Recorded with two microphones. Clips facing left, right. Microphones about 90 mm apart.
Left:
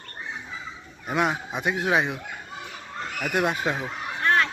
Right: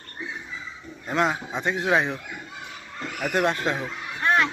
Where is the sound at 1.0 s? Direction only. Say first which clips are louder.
Right 1 dB; 5° left (ahead or behind).